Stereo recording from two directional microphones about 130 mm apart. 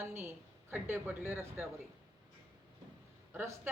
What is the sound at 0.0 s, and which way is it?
Speech, 15° right (ahead or behind).